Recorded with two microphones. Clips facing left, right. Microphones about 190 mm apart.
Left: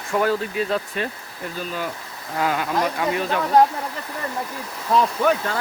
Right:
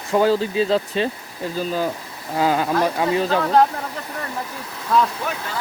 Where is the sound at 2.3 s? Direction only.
30° right (ahead or behind).